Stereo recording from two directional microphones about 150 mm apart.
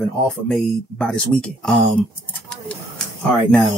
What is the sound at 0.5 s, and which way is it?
Speech, 5° left (ahead or behind).